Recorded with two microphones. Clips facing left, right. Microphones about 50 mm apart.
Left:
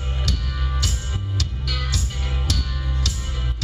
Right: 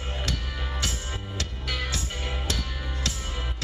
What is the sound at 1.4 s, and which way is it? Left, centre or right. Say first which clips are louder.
Music: even; right.